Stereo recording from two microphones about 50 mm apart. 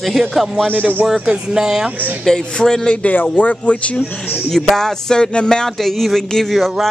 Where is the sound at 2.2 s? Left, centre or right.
Centre.